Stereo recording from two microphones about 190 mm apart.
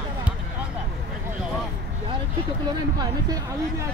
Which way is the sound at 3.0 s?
20° right (ahead or behind).